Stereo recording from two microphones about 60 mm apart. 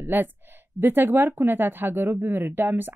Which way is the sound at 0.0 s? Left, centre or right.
Right.